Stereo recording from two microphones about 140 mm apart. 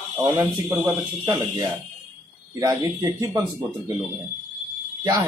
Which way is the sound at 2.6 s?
25° right (ahead or behind).